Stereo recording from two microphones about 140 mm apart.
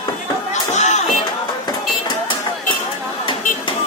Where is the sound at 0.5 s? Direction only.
55° left (ahead or behind).